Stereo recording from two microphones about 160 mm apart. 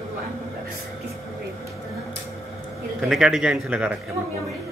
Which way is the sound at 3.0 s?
Centre (ahead or behind).